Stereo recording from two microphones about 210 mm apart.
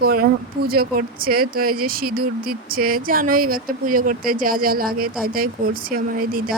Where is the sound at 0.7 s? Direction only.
45° right (ahead or behind).